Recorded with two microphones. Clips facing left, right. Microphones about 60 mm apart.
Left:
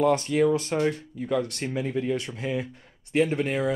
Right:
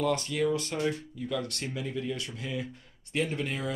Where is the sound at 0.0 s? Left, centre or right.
Left.